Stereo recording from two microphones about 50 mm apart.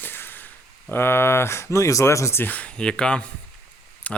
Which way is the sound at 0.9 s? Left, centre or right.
Left.